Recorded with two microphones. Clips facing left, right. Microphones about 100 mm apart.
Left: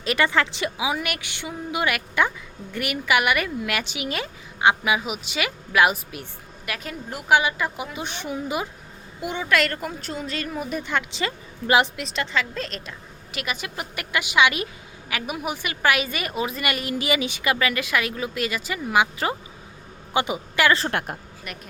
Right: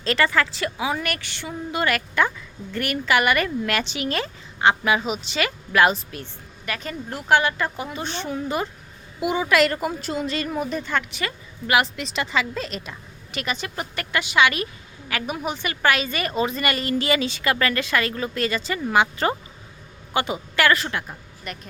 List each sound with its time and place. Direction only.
0.0 s a woman's voice: 15° left (ahead or behind)
9.2 s a woman's voice: 5° right (ahead or behind); by 11.0 s 10° left (ahead or behind)
11.2 s a woman's voice: 25° left (ahead or behind)
11.9 s a woman's voice: centre (ahead or behind)
20.1 s a woman's voice: 20° left (ahead or behind)
21.5 s a woman's voice: 5° left (ahead or behind)